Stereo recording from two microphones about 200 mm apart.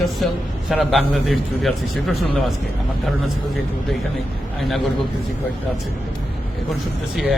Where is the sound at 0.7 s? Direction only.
Centre (ahead or behind).